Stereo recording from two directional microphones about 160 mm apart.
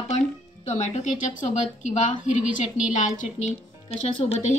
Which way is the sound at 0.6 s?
45° left (ahead or behind).